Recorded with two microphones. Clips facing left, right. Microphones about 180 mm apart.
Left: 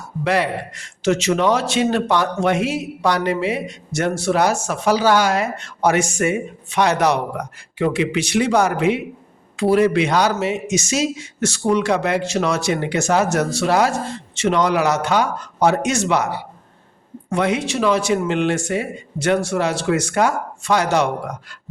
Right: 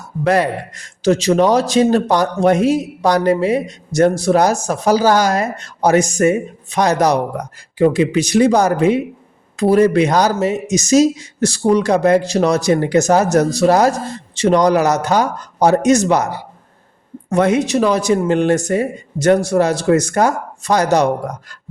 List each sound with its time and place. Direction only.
0.3 s a man's voice: 45° right (ahead or behind)